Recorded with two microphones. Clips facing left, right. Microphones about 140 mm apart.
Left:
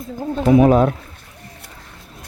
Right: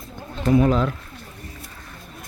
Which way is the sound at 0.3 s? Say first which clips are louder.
Left 6 dB; 70° left (ahead or behind).